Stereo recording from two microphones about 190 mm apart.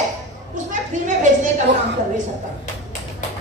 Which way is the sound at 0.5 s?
40° right (ahead or behind).